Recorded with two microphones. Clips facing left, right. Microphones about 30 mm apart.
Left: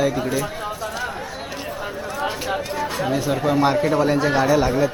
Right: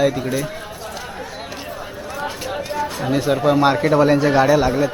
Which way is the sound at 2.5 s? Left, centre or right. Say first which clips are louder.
Even; centre.